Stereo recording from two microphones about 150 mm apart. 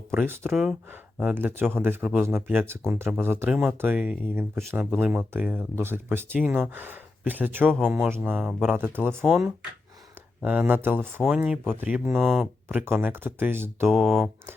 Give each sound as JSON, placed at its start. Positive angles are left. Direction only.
{"t": 0.2, "sound": "speech", "side_deg": -15}
{"t": 0.5, "sound": "speech", "side_deg": 0}
{"t": 3.5, "sound": "speech", "side_deg": -5}
{"t": 10.4, "sound": "speech", "side_deg": -10}
{"t": 13.9, "sound": "speech", "side_deg": 0}